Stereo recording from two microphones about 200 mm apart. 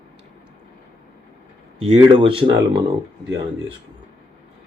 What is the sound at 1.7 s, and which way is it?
Speech, 30° right (ahead or behind).